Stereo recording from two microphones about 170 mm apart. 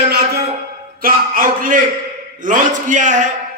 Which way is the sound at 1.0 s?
55° right (ahead or behind).